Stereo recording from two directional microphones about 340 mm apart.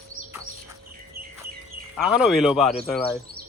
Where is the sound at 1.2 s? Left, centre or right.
Right.